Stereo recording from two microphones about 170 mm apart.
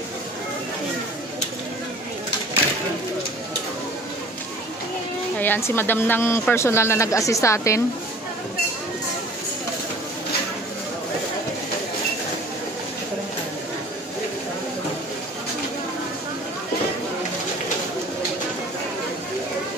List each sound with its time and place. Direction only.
5.4 s a woman's voice: 10° left (ahead or behind)